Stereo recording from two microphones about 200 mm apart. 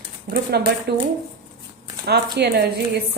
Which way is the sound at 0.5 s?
55° right (ahead or behind).